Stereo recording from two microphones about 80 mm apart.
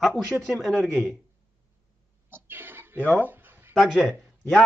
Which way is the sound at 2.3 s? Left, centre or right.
Right.